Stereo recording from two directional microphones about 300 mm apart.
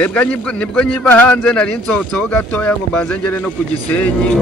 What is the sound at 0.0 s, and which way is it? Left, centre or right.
Speech, centre.